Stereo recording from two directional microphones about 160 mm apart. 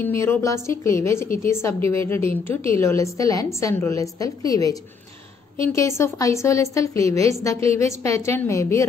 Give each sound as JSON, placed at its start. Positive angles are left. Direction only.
{"t": 0.0, "sound": "a woman's voice", "side_deg": 15}